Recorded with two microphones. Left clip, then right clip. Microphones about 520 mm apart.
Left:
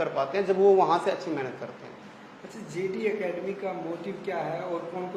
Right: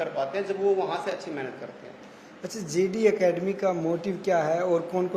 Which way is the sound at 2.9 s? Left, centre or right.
Right.